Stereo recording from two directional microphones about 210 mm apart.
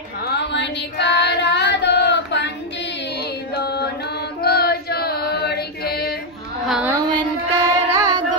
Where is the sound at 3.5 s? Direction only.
50° left (ahead or behind).